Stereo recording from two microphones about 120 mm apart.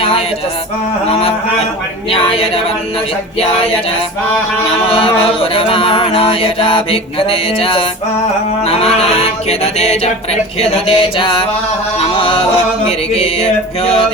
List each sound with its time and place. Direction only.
2.0 s mantra: 50° left (ahead or behind)
4.9 s mantra: 50° left (ahead or behind)
8.6 s music: 55° left (ahead or behind)
10.6 s mantra: 55° left (ahead or behind)
13.1 s music: 55° left (ahead or behind)